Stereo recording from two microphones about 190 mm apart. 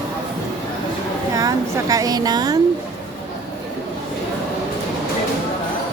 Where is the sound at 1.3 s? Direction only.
20° right (ahead or behind).